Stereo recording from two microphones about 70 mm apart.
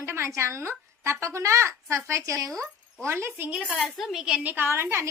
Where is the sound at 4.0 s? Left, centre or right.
Centre.